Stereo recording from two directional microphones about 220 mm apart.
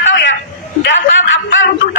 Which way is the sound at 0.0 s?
60° left (ahead or behind).